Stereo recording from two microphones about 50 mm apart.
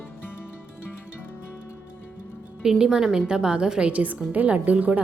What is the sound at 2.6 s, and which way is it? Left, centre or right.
A woman's voice, centre.